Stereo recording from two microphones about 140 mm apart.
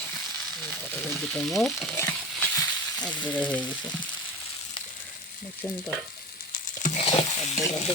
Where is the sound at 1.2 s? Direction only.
5° left (ahead or behind).